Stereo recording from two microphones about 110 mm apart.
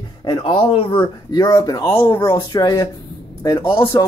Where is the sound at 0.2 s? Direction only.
50° left (ahead or behind).